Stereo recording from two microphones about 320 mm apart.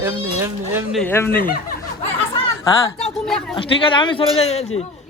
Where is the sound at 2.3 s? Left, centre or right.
Centre.